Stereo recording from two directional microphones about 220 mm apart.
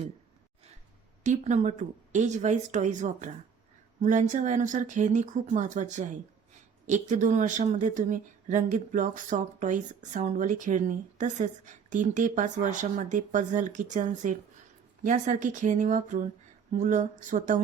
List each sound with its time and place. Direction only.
1.2 s speech: 35° right (ahead or behind)